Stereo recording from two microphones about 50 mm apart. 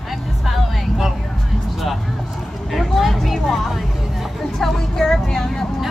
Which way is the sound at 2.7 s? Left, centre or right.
Centre.